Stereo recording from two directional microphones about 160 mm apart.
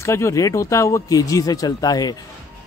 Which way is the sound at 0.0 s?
15° left (ahead or behind).